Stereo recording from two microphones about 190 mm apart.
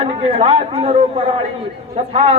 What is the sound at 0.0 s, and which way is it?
A man's voice, 30° right (ahead or behind).